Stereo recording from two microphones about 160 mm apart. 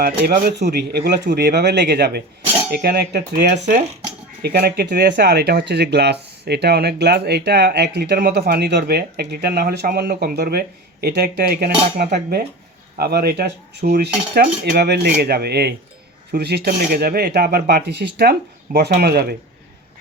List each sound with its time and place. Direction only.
0.0 s speech: 70° right (ahead or behind); by 3.2 s 90° right
3.3 s speech: 50° right (ahead or behind)
4.4 s speech: 90° right
13.8 s speech: 75° right (ahead or behind)
16.9 s speech: 70° right (ahead or behind)